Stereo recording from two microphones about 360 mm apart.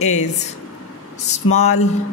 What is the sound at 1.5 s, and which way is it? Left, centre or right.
Speech, centre.